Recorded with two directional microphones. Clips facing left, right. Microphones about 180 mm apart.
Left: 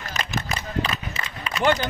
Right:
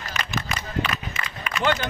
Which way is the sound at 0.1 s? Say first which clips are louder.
Left 1 dB; 35° left (ahead or behind).